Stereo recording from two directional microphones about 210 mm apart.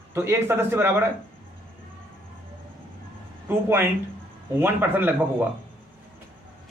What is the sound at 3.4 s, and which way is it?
A man's voice, 10° right (ahead or behind).